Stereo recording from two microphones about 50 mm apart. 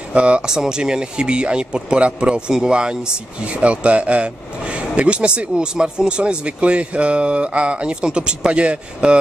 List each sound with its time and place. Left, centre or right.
0.1 s speech: right